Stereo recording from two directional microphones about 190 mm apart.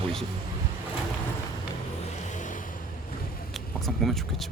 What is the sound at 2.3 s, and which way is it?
Vehicle, 40° left (ahead or behind).